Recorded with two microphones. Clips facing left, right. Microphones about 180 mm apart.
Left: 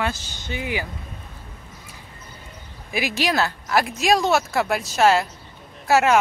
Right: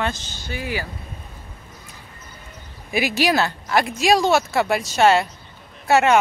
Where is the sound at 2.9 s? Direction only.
Centre (ahead or behind).